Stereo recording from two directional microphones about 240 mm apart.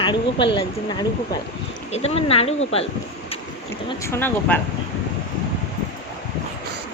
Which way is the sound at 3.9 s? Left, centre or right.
Centre.